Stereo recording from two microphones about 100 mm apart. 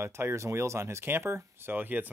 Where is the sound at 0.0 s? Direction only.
25° right (ahead or behind).